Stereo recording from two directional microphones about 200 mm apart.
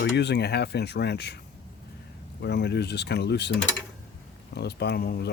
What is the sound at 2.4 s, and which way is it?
Speech, 55° left (ahead or behind).